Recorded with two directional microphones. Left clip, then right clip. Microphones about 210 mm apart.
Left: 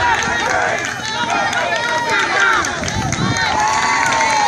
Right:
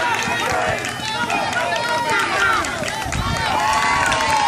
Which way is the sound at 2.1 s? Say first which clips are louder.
Left 4 dB; 30° right (ahead or behind).